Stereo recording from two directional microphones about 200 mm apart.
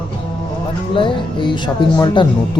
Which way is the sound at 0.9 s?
25° left (ahead or behind).